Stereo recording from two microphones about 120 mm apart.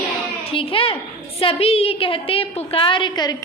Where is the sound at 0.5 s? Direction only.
50° left (ahead or behind).